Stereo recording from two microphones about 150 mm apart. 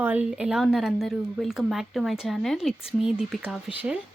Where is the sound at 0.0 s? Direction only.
10° right (ahead or behind).